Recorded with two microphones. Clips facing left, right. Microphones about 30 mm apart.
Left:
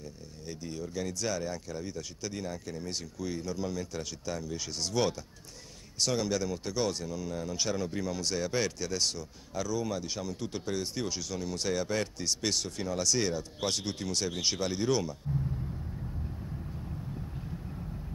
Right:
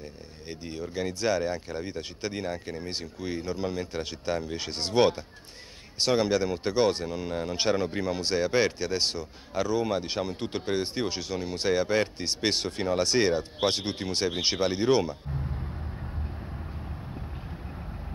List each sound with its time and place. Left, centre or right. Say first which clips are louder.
0.5 s speech: right 3 dB; right